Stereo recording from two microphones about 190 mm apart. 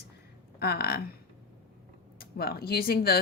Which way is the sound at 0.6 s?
55° left (ahead or behind).